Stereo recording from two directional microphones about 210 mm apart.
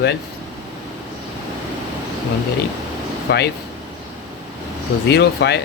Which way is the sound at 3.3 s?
55° left (ahead or behind).